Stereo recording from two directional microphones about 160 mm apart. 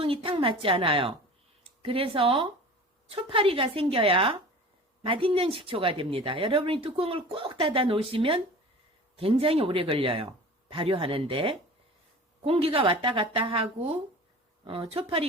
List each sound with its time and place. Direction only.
0.0 s speech: 35° right (ahead or behind)